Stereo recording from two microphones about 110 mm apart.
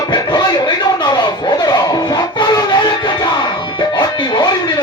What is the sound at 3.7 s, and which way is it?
Music, 45° left (ahead or behind).